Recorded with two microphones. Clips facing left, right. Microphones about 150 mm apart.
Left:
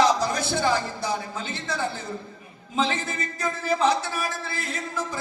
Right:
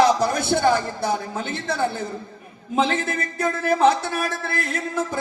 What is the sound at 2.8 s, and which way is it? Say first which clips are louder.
A man's voice: right 4 dB; 55° right (ahead or behind).